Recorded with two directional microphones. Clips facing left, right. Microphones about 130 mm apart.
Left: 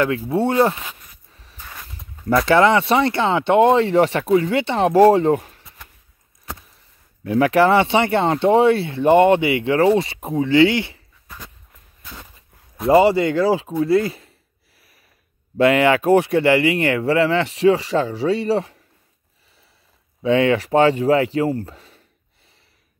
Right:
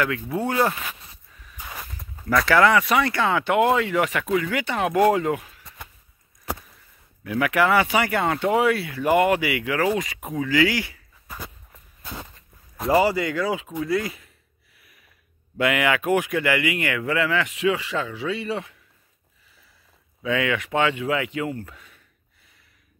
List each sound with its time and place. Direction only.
0.3 s speech: 25° left (ahead or behind)
1.3 s a sound: 30° left (ahead or behind)
1.6 s a sound: 15° right (ahead or behind)
2.2 s speech: 25° left (ahead or behind)
7.2 s speech: 30° left (ahead or behind)
11.2 s a sound: 5° right (ahead or behind)
12.0 s walk: 20° right (ahead or behind)
12.9 s speech: 25° left (ahead or behind)
15.5 s speech: 30° left (ahead or behind)
20.2 s speech: 30° left (ahead or behind)